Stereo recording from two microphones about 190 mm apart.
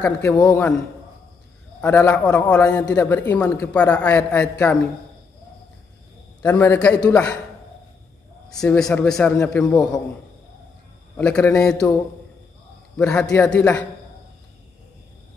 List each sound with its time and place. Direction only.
0.0 s a man's voice: 10° left (ahead or behind)
1.8 s a man's voice: 10° left (ahead or behind)
2.2 s a man's voice: 20° left (ahead or behind)
2.5 s a man's voice: 5° left (ahead or behind)
6.4 s a man's voice: 10° left (ahead or behind)
8.5 s a man's voice: 5° left (ahead or behind)
11.1 s a man's voice: 5° left (ahead or behind)
12.9 s a man's voice: 5° left (ahead or behind)